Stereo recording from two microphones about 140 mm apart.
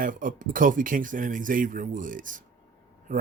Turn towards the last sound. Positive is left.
turn(degrees=-70)  # may be behind; listen again after turning